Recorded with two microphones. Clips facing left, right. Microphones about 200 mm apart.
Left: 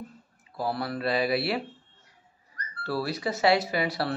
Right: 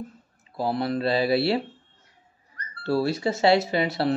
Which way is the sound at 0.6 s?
25° right (ahead or behind).